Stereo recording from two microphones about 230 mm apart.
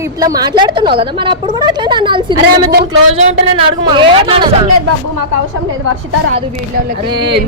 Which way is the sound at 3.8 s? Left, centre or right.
Right.